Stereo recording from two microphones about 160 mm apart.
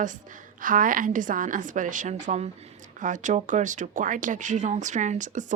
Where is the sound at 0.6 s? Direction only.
60° right (ahead or behind).